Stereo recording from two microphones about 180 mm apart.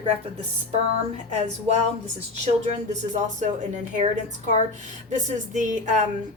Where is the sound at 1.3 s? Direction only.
35° right (ahead or behind).